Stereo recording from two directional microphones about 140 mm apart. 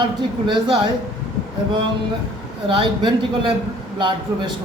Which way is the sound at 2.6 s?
35° right (ahead or behind).